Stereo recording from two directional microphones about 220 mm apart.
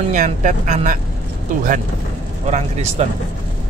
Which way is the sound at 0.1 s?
35° right (ahead or behind).